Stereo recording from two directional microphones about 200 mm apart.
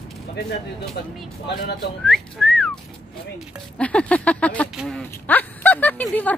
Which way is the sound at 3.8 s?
5° left (ahead or behind).